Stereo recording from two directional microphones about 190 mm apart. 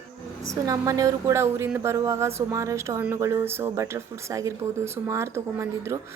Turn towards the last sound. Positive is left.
turn(degrees=-15)  # may be behind; listen again after turning